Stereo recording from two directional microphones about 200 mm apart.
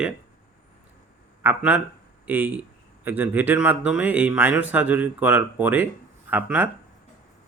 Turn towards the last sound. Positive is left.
turn(degrees=-10)  # may be behind; listen again after turning